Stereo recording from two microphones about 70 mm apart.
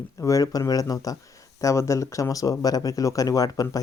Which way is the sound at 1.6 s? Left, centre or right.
Left.